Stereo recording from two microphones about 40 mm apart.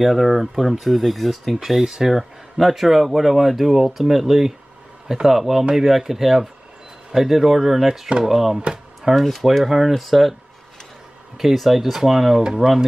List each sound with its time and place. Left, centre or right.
0.0 s speech: centre
9.1 s speech: centre
11.3 s speech: centre